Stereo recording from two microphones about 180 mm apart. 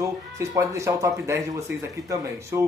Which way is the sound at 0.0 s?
15° right (ahead or behind).